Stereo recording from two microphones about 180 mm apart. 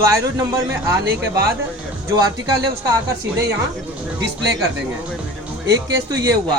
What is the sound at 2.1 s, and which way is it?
Speech, 20° right (ahead or behind).